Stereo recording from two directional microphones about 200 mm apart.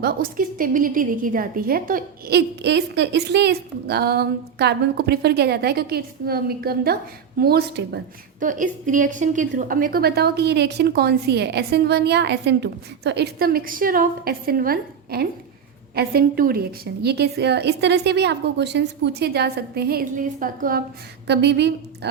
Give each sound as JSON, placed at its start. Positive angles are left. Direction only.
{"t": 0.0, "sound": "a woman's voice", "side_deg": -45}
{"t": 8.4, "sound": "a woman's voice", "side_deg": -40}
{"t": 21.2, "sound": "a woman's voice", "side_deg": -60}